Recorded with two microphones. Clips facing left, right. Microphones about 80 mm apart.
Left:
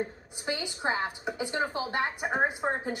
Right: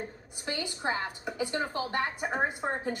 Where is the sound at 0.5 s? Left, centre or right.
Centre.